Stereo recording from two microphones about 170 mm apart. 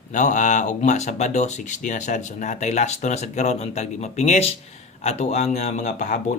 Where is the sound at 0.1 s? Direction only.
45° left (ahead or behind).